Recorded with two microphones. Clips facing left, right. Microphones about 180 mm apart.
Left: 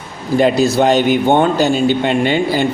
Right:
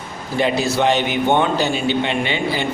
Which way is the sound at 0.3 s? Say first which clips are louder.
Left 6 dB; 40° left (ahead or behind).